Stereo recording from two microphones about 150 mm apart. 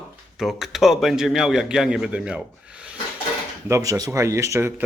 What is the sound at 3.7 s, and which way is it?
Speech, 25° right (ahead or behind).